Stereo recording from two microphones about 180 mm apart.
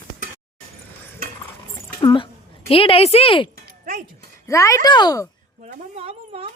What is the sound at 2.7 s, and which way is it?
Speech, 30° left (ahead or behind).